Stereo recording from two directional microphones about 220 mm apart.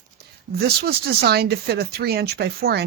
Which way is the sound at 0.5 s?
45° right (ahead or behind).